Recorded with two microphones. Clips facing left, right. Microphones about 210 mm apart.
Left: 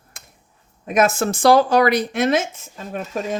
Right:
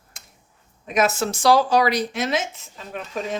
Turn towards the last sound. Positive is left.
turn(degrees=45)  # may be behind; listen again after turning